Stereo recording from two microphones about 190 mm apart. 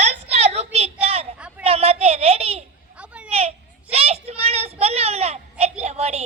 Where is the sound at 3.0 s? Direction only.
5° right (ahead or behind).